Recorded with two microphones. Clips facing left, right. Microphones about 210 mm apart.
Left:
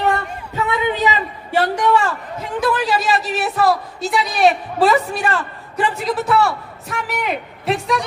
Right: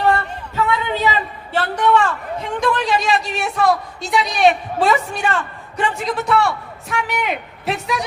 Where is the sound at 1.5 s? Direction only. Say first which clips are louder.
Left 1 dB; 10° left (ahead or behind).